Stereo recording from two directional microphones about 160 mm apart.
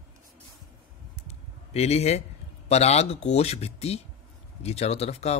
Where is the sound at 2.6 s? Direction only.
40° left (ahead or behind).